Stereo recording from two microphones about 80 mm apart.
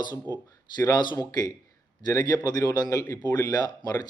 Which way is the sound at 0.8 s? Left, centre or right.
Left.